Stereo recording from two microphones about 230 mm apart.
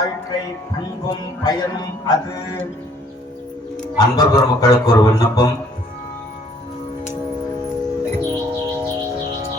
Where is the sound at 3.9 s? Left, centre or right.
Centre.